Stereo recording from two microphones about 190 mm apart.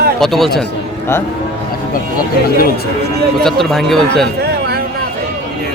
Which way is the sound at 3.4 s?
Centre (ahead or behind).